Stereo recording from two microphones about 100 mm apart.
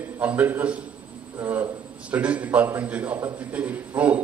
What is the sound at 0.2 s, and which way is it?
A man's voice, 15° right (ahead or behind).